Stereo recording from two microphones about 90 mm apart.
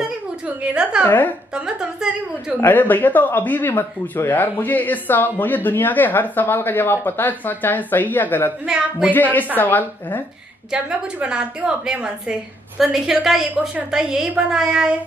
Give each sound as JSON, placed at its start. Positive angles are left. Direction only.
{"t": 1.0, "sound": "speech", "side_deg": 20}
{"t": 1.5, "sound": "a woman's voice", "side_deg": -10}
{"t": 2.6, "sound": "speech", "side_deg": 20}
{"t": 8.6, "sound": "a woman's voice", "side_deg": -10}
{"t": 9.1, "sound": "speech", "side_deg": 20}
{"t": 10.7, "sound": "a woman's voice", "side_deg": -10}